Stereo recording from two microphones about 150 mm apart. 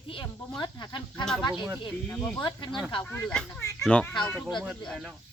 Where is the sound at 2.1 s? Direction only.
10° left (ahead or behind).